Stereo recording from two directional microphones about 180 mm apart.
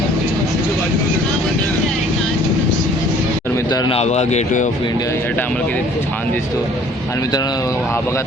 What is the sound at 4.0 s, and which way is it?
Speech, 40° left (ahead or behind).